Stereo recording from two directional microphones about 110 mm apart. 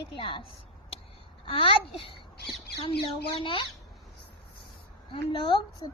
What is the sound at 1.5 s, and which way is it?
Speech, 55° left (ahead or behind).